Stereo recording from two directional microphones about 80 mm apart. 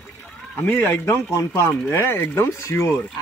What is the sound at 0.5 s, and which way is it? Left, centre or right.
A man's voice, left.